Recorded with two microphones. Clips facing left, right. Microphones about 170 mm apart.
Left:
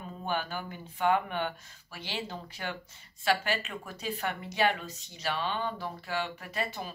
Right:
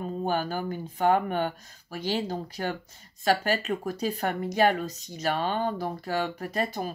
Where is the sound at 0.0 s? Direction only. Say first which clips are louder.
Right 6 dB; 40° right (ahead or behind).